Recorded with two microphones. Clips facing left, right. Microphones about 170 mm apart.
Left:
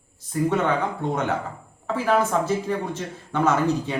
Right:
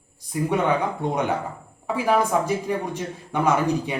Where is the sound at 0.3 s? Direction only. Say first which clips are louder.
Even; 10° right (ahead or behind).